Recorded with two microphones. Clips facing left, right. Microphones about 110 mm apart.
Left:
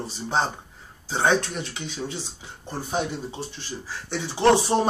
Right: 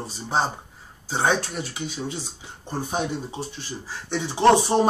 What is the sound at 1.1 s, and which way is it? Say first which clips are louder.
Speech: left 1 dB; 40° right (ahead or behind).